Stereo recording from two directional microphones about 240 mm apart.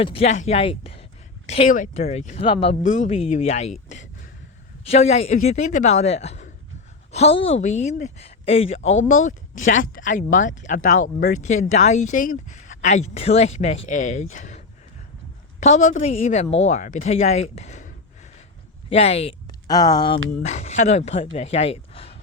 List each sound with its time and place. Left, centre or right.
0.0 s speech: left
15.6 s speech: left